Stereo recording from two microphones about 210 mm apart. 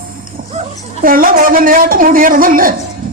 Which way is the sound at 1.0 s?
45° right (ahead or behind).